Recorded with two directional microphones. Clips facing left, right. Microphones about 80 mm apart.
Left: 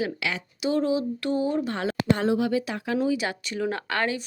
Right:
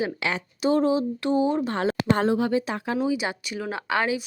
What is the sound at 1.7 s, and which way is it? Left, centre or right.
Speech, right.